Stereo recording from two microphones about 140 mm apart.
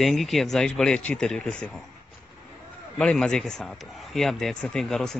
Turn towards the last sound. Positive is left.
turn(degrees=0)  # may be behind; listen again after turning